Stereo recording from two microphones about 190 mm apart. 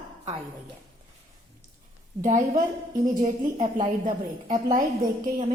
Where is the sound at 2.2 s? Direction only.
40° right (ahead or behind).